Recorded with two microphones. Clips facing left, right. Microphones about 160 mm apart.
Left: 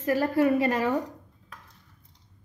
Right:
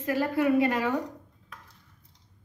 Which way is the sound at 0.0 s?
40° left (ahead or behind).